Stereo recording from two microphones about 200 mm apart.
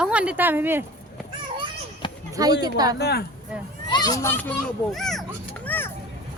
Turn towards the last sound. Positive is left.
turn(degrees=10)  # may be behind; listen again after turning